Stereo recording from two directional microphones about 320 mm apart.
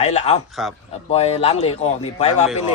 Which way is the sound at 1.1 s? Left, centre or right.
Centre.